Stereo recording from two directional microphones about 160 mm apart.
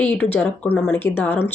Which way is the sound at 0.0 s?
10° left (ahead or behind).